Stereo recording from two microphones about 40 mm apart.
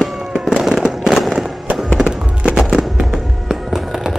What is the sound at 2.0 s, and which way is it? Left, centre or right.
Music, right.